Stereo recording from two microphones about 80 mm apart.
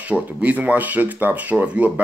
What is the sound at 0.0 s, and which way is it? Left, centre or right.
Speech, centre.